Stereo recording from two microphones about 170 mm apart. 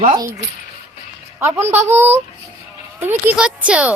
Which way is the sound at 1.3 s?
15° right (ahead or behind).